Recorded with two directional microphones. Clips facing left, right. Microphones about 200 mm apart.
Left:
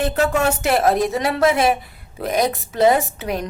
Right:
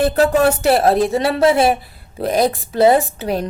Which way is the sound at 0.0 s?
35° right (ahead or behind).